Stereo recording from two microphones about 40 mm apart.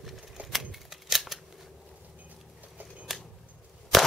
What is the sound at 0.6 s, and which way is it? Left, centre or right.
Scissors, centre.